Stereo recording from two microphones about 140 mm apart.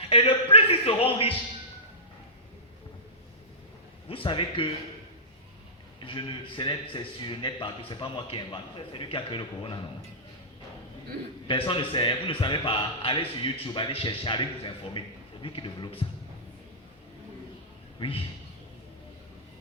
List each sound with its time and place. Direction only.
0.0 s a sound: 45° left (ahead or behind)
4.1 s a man's voice: 40° left (ahead or behind)
6.0 s a man's voice: 35° left (ahead or behind)
11.4 s a man's voice: 40° left (ahead or behind)
18.0 s a man's voice: 40° left (ahead or behind)